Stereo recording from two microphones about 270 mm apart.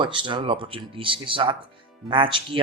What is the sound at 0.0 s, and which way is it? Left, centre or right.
Speech, centre.